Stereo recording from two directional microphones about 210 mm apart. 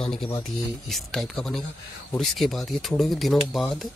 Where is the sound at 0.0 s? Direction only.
Centre (ahead or behind).